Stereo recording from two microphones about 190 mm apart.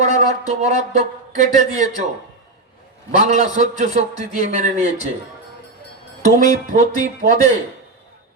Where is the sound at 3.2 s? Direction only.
35° right (ahead or behind).